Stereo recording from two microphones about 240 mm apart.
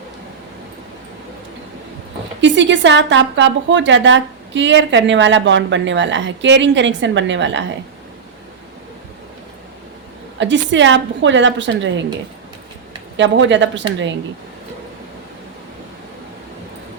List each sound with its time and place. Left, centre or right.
2.4 s a woman's voice: right
10.3 s a woman's voice: right
13.1 s a woman's voice: right